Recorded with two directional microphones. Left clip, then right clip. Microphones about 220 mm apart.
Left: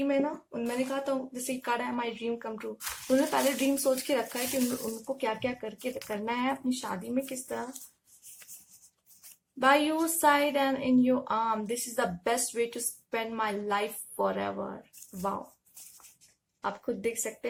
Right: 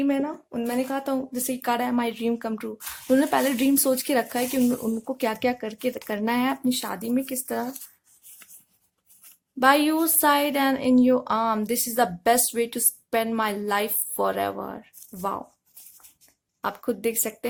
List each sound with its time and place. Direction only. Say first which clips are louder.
0.0 s speech: right 3 dB; 50° right (ahead or behind)
9.6 s speech: right 5 dB; 50° right (ahead or behind)
15.8 s a sound: even; centre (ahead or behind)
16.6 s speech: right 5 dB; 50° right (ahead or behind)